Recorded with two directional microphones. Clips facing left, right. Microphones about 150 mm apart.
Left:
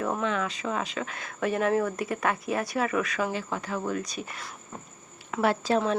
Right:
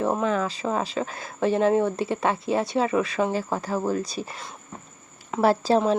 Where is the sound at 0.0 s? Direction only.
30° right (ahead or behind).